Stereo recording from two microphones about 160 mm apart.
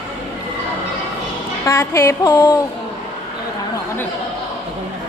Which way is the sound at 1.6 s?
15° left (ahead or behind).